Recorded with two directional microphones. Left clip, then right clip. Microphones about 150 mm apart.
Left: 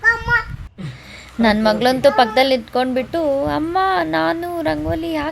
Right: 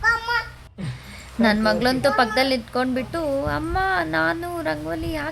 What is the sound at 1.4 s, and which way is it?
A woman's voice, 25° left (ahead or behind).